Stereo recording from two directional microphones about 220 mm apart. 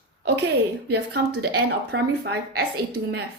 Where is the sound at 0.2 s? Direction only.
50° right (ahead or behind).